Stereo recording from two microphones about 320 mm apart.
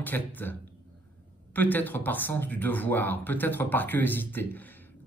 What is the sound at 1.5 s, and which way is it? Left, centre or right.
Speech, centre.